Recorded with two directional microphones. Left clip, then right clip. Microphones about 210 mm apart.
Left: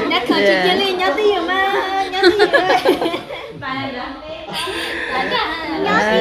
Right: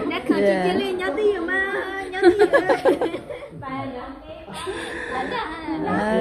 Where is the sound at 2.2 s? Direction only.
30° right (ahead or behind).